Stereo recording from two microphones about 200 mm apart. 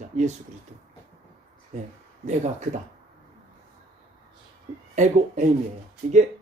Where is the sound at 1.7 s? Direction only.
35° right (ahead or behind).